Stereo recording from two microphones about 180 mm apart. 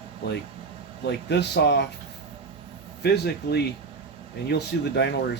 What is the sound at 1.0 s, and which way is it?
Speech, 70° left (ahead or behind).